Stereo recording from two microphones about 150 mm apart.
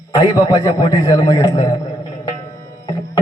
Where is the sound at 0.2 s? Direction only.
25° left (ahead or behind).